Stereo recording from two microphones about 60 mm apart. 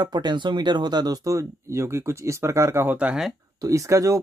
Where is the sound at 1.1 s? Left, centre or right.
Right.